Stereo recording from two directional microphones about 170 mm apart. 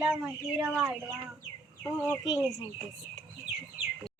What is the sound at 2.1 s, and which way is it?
Speech, 20° left (ahead or behind).